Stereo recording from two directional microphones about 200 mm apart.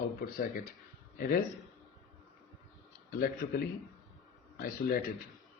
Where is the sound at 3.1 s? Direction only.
50° left (ahead or behind).